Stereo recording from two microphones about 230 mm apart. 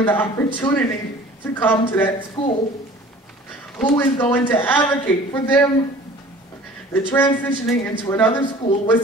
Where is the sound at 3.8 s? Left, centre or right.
Centre.